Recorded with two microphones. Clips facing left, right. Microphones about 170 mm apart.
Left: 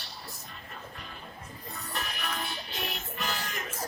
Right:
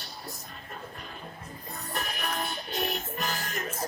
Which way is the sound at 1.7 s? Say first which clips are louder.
Right 3 dB; 50° right (ahead or behind).